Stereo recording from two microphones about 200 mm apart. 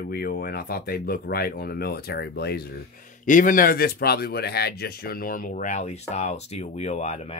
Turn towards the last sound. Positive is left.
turn(degrees=35)  # may be behind; listen again after turning